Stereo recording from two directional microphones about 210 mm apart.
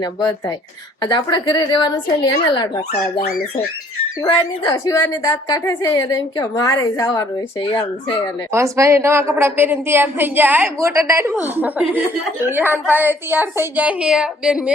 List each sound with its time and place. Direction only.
0.0 s a woman's voice: 20° left (ahead or behind)
2.9 s speech: 45° left (ahead or behind)
4.3 s a woman's voice: 20° left (ahead or behind)
8.5 s a woman's voice: 15° right (ahead or behind)